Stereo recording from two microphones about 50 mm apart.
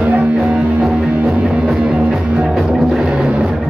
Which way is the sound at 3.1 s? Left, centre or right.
Right.